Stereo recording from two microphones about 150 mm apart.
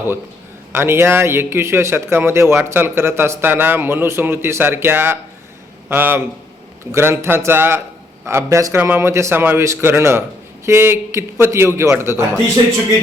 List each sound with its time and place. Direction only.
0.7 s speech: 15° right (ahead or behind)